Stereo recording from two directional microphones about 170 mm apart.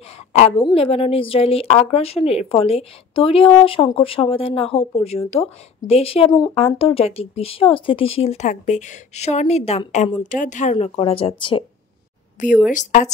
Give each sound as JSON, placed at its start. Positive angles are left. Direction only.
{"t": 0.3, "sound": "a woman's voice", "side_deg": 35}
{"t": 10.2, "sound": "a woman's voice", "side_deg": 50}
{"t": 12.4, "sound": "speech", "side_deg": 45}